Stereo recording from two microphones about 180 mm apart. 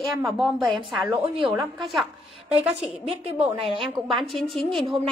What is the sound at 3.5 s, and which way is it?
Speech, 30° right (ahead or behind).